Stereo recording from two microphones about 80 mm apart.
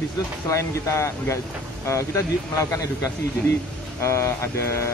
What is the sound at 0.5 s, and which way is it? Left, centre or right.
Speech, left.